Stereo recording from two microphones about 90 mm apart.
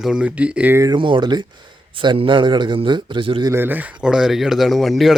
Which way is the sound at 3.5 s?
20° right (ahead or behind).